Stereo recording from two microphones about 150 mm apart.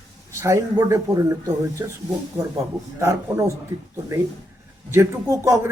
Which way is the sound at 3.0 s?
20° right (ahead or behind).